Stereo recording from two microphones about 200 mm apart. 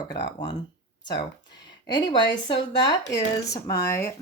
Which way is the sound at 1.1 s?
20° left (ahead or behind).